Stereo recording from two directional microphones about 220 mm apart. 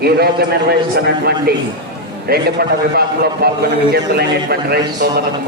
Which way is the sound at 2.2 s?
45° right (ahead or behind).